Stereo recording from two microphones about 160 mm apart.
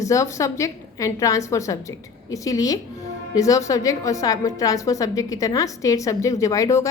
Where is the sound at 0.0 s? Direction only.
20° left (ahead or behind).